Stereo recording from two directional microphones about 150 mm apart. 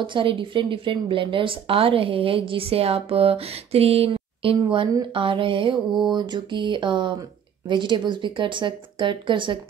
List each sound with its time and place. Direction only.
0.1 s speech: 35° right (ahead or behind)